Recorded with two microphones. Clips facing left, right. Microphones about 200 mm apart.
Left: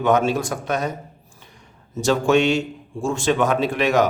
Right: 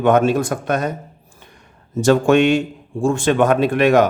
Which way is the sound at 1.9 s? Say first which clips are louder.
Right 4 dB; 55° right (ahead or behind).